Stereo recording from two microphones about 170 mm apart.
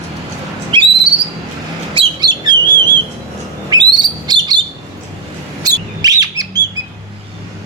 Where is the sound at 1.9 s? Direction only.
30° right (ahead or behind).